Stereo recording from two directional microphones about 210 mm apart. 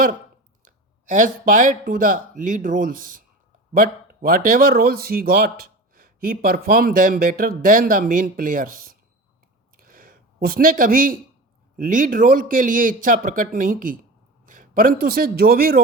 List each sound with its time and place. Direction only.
0.6 s speech: 40° right (ahead or behind)
9.7 s a sound: 40° right (ahead or behind)
11.8 s a man's voice: 40° right (ahead or behind)